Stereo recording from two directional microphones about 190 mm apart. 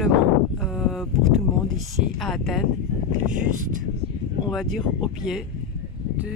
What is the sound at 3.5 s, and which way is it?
Speech, 45° right (ahead or behind).